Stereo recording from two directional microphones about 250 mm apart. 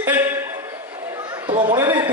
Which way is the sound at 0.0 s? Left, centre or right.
Centre.